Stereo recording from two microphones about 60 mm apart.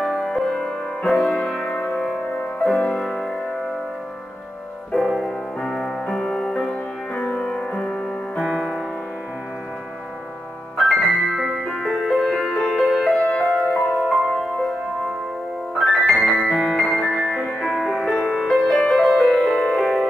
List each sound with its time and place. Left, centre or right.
0.0 s music: centre
4.9 s music: centre
5.6 s music: centre
10.8 s music: centre
11.7 s music: centre
13.2 s music: centre
13.7 s music: centre
15.7 s piano: centre
16.6 s music: centre
16.9 s music: centre